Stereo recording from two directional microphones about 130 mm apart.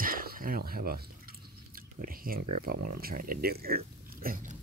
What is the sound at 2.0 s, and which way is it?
Speech, 90° right.